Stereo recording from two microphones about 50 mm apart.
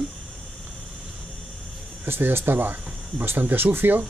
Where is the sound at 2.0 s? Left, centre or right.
Right.